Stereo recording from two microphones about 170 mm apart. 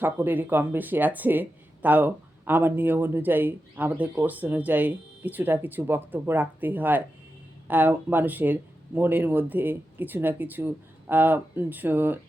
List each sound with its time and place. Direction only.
0.0 s speech: 10° right (ahead or behind)